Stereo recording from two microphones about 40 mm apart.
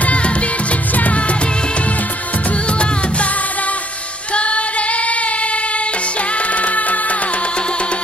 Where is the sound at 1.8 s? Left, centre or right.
Left.